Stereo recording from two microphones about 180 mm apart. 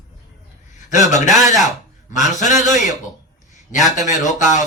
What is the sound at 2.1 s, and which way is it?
Speech, 45° left (ahead or behind).